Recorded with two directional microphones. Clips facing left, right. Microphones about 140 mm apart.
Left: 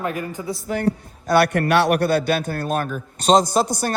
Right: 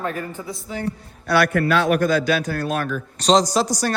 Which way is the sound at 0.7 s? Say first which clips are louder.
Left 7 dB; 60° left (ahead or behind).